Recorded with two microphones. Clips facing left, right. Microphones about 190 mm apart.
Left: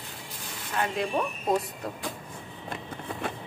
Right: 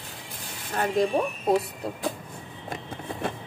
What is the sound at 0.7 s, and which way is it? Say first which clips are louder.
Speech: right 5 dB; 40° right (ahead or behind).